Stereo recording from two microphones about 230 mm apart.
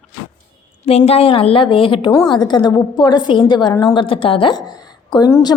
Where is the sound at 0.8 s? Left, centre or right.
Left.